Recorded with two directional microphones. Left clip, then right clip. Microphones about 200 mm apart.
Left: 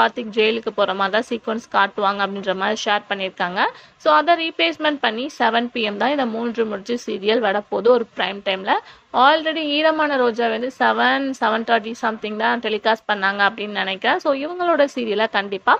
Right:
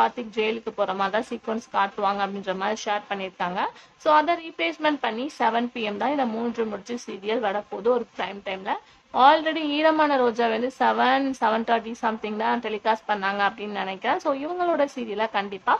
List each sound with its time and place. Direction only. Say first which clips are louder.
0.0 s speech: left 6 dB; 20° left (ahead or behind)